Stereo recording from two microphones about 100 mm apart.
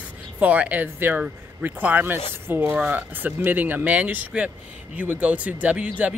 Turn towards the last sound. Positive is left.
turn(degrees=-10)  # may be behind; listen again after turning